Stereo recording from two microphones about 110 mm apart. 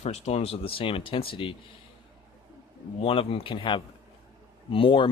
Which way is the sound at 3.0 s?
60° left (ahead or behind).